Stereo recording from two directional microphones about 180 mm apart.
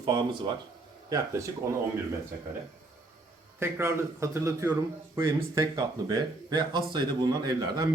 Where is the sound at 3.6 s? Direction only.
15° right (ahead or behind).